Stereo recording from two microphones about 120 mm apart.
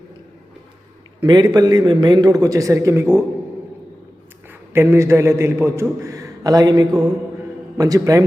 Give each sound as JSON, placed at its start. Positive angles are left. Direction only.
{"t": 1.2, "sound": "a man's voice", "side_deg": -35}
{"t": 4.7, "sound": "a man's voice", "side_deg": -20}